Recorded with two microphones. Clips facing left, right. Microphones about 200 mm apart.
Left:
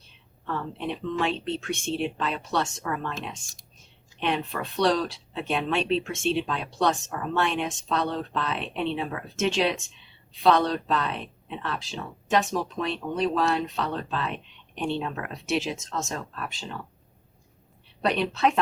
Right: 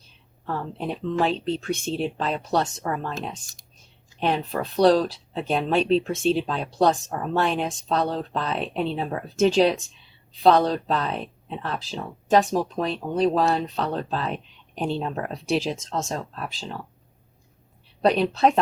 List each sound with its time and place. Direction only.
0.4 s speech: 35° right (ahead or behind)
18.0 s speech: 35° right (ahead or behind)